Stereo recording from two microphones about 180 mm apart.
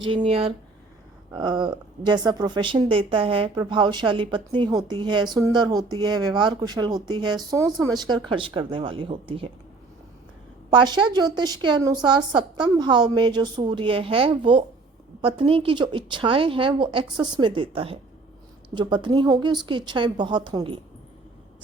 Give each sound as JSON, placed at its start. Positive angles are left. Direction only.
{"t": 0.0, "sound": "speech", "side_deg": -30}
{"t": 10.7, "sound": "speech", "side_deg": -25}